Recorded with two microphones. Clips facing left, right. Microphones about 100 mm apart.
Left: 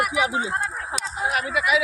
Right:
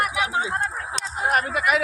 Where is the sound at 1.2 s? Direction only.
50° right (ahead or behind).